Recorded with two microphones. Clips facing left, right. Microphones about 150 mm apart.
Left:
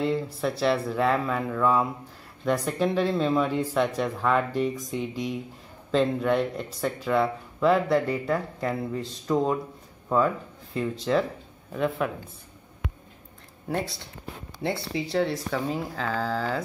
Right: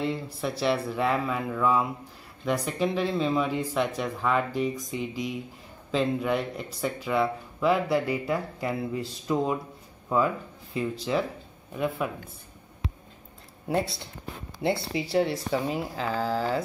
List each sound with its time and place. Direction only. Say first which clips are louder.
0.0 s speech: left 4 dB; centre (ahead or behind)
15.0 s speech: even; 5° right (ahead or behind)